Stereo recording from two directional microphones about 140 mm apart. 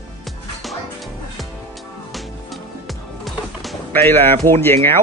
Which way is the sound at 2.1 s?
Centre (ahead or behind).